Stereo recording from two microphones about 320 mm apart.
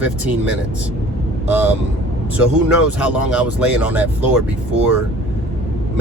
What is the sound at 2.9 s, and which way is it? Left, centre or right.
Speech, centre.